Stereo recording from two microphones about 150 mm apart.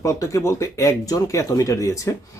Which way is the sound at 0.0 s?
20° left (ahead or behind).